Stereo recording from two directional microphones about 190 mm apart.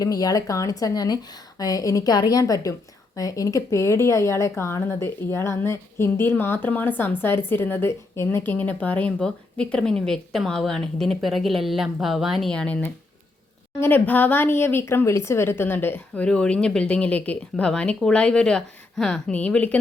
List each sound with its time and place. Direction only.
0.0 s a woman's voice: 20° left (ahead or behind)